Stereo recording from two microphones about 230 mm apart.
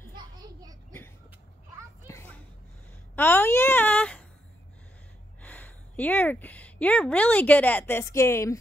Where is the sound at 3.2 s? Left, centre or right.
Centre.